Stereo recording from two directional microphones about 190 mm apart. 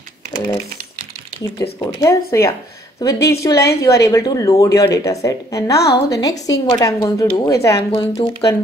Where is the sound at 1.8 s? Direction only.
20° left (ahead or behind).